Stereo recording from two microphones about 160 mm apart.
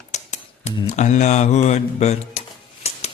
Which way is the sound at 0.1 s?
45° left (ahead or behind).